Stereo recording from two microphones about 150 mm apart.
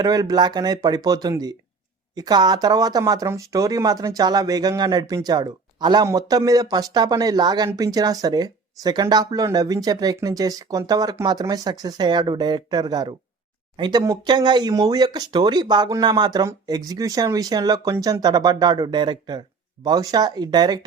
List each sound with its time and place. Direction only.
0.0 s speech: 25° right (ahead or behind)